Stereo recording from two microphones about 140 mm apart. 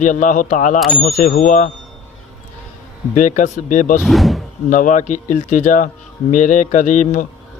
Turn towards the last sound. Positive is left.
turn(degrees=65)  # may be behind; listen again after turning